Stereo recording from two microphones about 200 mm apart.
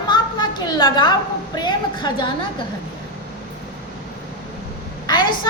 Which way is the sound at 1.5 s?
20° left (ahead or behind).